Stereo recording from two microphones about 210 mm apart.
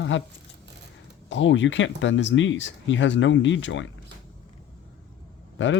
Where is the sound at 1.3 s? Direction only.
60° left (ahead or behind).